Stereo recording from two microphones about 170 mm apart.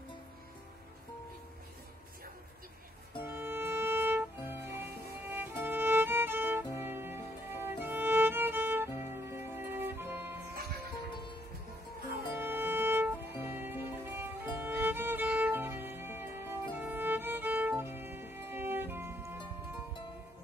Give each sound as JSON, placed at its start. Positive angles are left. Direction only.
{"t": 3.2, "sound": "music", "side_deg": -15}
{"t": 12.3, "sound": "music", "side_deg": -10}